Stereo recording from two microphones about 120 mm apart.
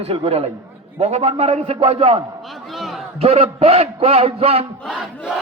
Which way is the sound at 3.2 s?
55° right (ahead or behind).